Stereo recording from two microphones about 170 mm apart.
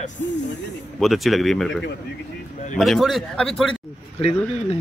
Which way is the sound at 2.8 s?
Centre (ahead or behind).